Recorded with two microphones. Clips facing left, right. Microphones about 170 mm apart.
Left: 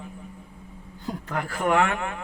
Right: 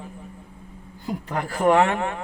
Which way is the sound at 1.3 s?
35° right (ahead or behind).